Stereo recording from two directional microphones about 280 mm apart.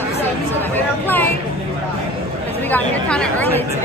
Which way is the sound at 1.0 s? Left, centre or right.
Centre.